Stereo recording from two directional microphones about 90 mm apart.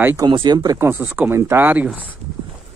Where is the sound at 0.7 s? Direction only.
30° right (ahead or behind).